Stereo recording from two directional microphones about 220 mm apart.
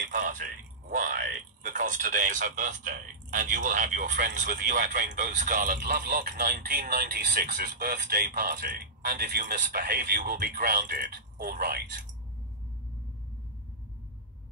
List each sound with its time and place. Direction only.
0.1 s a sound: 35° right (ahead or behind)
1.6 s speech: 35° right (ahead or behind)
4.1 s a man's voice: 50° right (ahead or behind)
4.4 s a man's voice: 40° right (ahead or behind)